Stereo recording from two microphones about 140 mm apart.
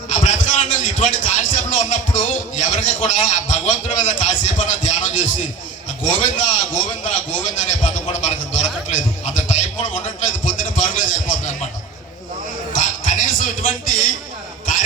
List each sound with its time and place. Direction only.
0.1 s a man's voice: 60° left (ahead or behind)
8.2 s a sound: 60° left (ahead or behind)
12.7 s music: 65° left (ahead or behind)